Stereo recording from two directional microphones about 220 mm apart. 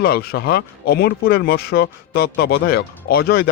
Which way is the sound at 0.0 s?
45° left (ahead or behind).